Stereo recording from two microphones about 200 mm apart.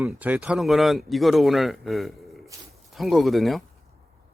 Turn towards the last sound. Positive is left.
turn(degrees=0)  # may be behind; listen again after turning